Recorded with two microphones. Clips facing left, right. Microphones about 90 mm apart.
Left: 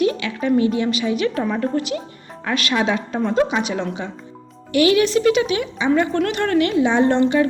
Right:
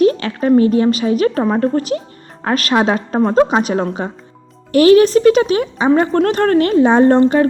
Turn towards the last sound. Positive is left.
turn(degrees=-40)  # may be behind; listen again after turning